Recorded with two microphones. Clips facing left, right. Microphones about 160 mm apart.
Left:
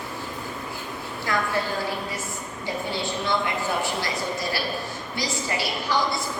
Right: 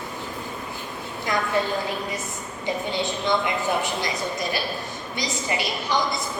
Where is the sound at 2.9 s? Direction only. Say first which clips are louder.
Right 2 dB; 20° right (ahead or behind).